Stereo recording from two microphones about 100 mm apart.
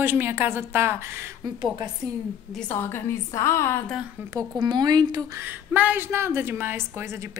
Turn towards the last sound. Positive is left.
turn(degrees=-25)  # may be behind; listen again after turning